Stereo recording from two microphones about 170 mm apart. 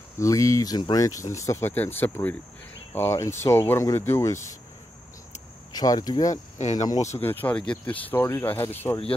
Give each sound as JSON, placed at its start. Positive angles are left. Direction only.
{"t": 0.2, "sound": "speech", "side_deg": 20}
{"t": 5.8, "sound": "speech", "side_deg": 25}
{"t": 6.3, "sound": "speech", "side_deg": 45}
{"t": 7.2, "sound": "speech", "side_deg": 10}